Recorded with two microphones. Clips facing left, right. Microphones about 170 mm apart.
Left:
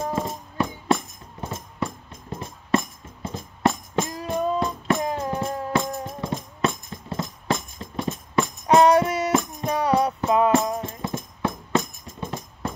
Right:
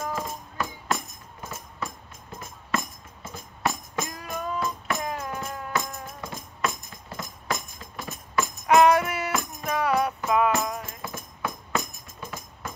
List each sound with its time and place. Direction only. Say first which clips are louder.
0.0 s music: left 4 dB; 30° left (ahead or behind)